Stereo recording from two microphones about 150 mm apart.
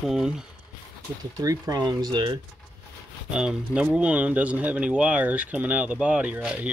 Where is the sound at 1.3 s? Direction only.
25° right (ahead or behind).